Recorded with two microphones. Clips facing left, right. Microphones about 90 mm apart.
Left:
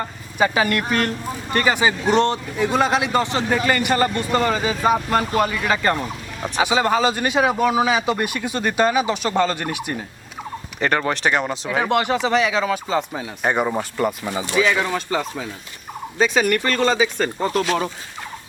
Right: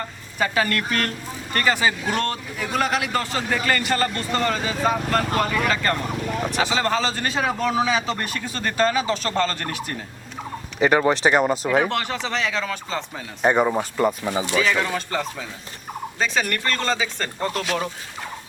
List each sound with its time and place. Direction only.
0.3 s a man's voice: 15° left (ahead or behind)
10.8 s speech: 5° right (ahead or behind)
11.9 s a man's voice: 15° left (ahead or behind)
13.5 s speech: centre (ahead or behind)
14.7 s a man's voice: 5° left (ahead or behind)